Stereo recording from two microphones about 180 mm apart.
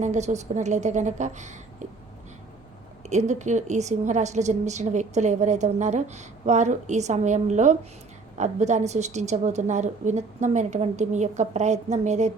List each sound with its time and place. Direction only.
0.0 s a woman's voice: 40° right (ahead or behind)
3.1 s a woman's voice: 40° right (ahead or behind)